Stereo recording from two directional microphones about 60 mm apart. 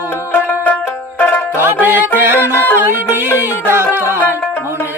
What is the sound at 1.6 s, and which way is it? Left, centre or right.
Music, right.